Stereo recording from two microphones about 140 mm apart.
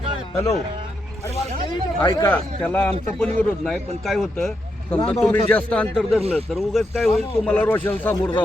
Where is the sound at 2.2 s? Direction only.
10° left (ahead or behind).